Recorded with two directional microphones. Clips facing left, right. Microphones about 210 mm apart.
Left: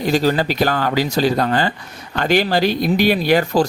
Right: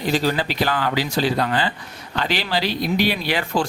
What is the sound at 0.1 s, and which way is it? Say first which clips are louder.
Speech: left 4 dB; 45° left (ahead or behind).